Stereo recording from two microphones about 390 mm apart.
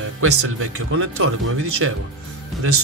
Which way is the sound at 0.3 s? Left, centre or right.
Right.